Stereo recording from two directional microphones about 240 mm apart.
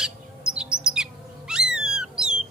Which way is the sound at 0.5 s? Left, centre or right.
Centre.